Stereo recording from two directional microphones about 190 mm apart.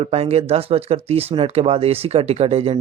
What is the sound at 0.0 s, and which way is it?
Speech, 35° right (ahead or behind).